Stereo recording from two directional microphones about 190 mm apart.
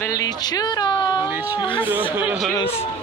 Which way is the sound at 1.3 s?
10° right (ahead or behind).